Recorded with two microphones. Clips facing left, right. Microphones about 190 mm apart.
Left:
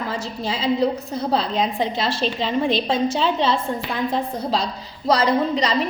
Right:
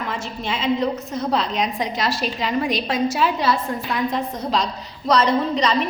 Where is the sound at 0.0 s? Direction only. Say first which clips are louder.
Left 1 dB; 35° left (ahead or behind).